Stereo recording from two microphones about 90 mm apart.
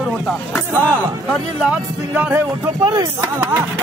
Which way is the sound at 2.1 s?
20° right (ahead or behind).